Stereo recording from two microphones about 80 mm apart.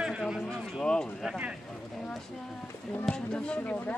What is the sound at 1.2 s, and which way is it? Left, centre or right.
Speech, centre.